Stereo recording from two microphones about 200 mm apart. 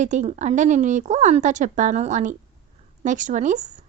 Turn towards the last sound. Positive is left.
turn(degrees=-40)  # may be behind; listen again after turning